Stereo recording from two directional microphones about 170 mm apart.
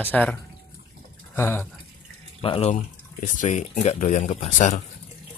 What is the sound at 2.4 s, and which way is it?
Speech, 35° left (ahead or behind).